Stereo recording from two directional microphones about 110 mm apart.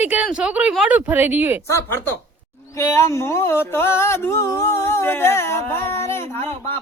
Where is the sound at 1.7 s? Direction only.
20° left (ahead or behind).